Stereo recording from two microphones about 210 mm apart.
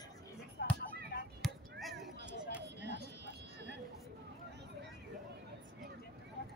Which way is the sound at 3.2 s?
55° right (ahead or behind).